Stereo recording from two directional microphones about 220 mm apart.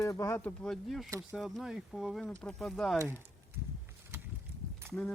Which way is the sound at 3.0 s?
10° right (ahead or behind).